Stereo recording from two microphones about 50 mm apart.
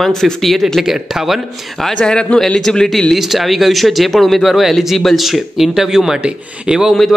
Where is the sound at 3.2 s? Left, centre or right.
Centre.